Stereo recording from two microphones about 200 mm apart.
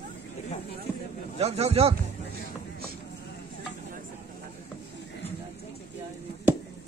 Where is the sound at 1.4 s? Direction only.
30° right (ahead or behind).